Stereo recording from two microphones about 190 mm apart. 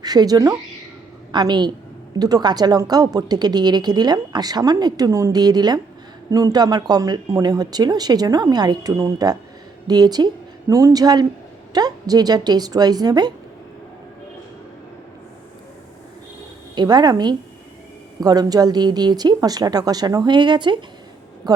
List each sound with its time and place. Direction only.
0.0 s a woman's voice: 20° right (ahead or behind)
16.7 s a woman's voice: 20° right (ahead or behind)